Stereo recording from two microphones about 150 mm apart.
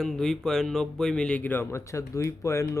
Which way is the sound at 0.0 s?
5° left (ahead or behind).